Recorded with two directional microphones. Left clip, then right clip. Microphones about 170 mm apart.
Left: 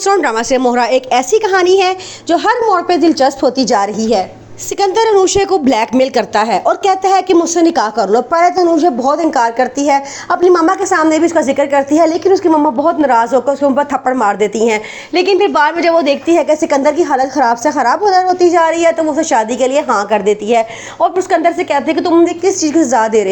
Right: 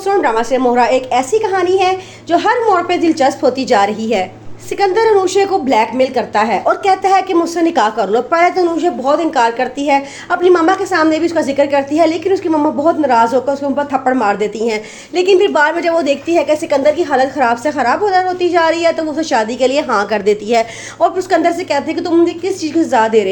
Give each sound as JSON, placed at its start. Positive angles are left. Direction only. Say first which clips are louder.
{"t": 0.0, "sound": "a woman's voice", "louder": "left 1 dB", "side_deg": 55}
{"t": 2.3, "sound": "a woman's voice", "louder": "left 1 dB", "side_deg": 40}
{"t": 4.8, "sound": "a woman's voice", "louder": "left 1 dB", "side_deg": 40}
{"t": 12.3, "sound": "a woman's voice", "louder": "left 4 dB", "side_deg": 5}
{"t": 13.9, "sound": "a woman's voice", "louder": "left 1 dB", "side_deg": 30}
{"t": 15.1, "sound": "a woman's voice", "louder": "even", "side_deg": 10}
{"t": 16.2, "sound": "a woman's voice", "louder": "left 2 dB", "side_deg": 25}
{"t": 20.1, "sound": "a woman's voice", "louder": "left 2 dB", "side_deg": 5}
{"t": 22.2, "sound": "a woman's voice", "louder": "left 3 dB", "side_deg": 20}